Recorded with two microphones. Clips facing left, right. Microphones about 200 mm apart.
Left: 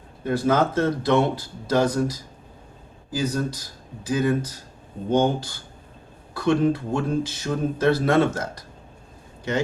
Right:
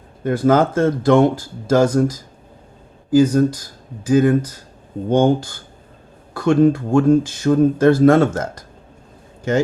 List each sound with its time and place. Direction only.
0.3 s speech: 50° right (ahead or behind)